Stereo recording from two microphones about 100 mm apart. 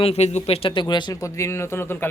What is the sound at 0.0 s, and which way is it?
Speech, 90° left.